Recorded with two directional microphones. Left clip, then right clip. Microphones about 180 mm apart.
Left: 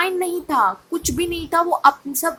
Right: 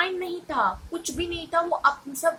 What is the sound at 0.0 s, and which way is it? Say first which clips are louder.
A woman's voice: left 6 dB; 50° left (ahead or behind).